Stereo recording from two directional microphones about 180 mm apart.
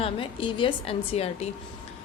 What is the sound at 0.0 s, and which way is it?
A woman's voice, 30° left (ahead or behind).